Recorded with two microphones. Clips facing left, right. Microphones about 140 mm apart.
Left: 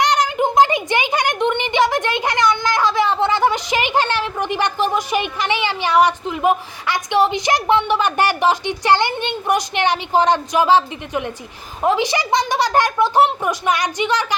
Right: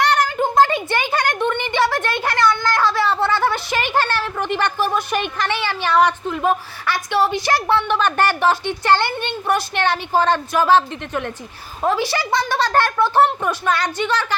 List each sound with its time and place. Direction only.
0.0 s a child's voice: 15° left (ahead or behind)